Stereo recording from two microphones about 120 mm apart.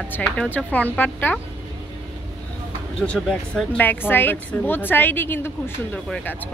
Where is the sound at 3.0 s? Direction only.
5° left (ahead or behind).